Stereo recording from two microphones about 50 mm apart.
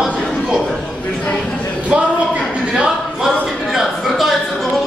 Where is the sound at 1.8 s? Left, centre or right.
Right.